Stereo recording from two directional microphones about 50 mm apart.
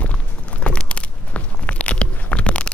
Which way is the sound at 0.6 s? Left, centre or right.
Left.